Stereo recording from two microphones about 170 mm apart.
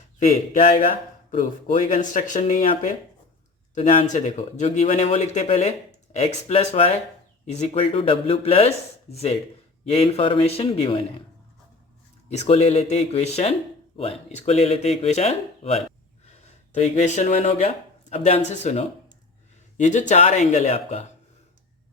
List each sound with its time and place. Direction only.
1.3 s speech: 50° left (ahead or behind)
3.9 s speech: 45° left (ahead or behind)
12.3 s speech: 40° left (ahead or behind)